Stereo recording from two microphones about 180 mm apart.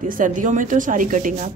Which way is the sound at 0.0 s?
45° right (ahead or behind).